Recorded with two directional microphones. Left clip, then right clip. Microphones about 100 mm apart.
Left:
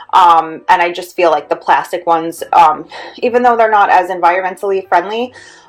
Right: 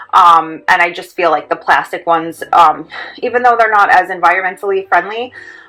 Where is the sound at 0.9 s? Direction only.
30° left (ahead or behind).